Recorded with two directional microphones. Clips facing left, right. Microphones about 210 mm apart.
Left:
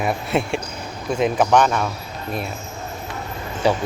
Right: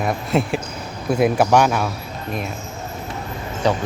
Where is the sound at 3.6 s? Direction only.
10° left (ahead or behind).